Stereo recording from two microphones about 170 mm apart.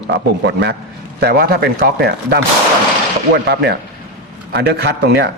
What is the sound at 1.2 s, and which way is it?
A man's voice, 65° right (ahead or behind).